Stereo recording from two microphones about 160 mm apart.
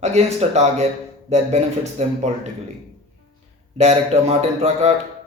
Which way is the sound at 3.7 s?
45° right (ahead or behind).